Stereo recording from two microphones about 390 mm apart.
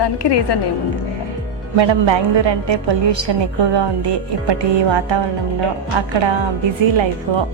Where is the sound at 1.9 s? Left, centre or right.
Right.